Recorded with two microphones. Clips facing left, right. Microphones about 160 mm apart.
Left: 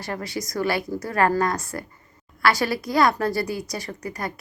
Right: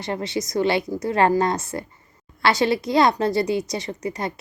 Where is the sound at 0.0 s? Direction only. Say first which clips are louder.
Right 4 dB; 25° right (ahead or behind).